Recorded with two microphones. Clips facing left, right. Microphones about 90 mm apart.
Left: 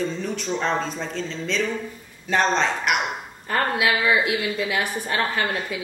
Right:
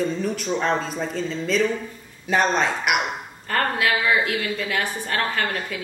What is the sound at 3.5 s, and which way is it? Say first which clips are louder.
A woman's voice: even; 15° left (ahead or behind).